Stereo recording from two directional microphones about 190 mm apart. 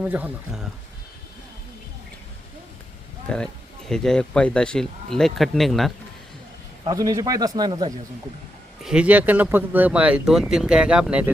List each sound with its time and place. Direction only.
0.0 s speech: 5° right (ahead or behind)
3.3 s speech: 5° left (ahead or behind)
6.8 s a man's voice: 20° right (ahead or behind)
8.8 s speech: 5° right (ahead or behind)